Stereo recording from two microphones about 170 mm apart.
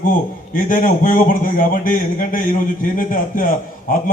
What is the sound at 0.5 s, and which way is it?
A man's voice, 55° left (ahead or behind).